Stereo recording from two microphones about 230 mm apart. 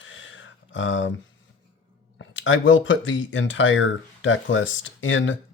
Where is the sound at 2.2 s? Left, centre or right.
Left.